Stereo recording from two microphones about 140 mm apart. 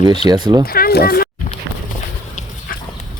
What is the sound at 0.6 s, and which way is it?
Speech, 90° left.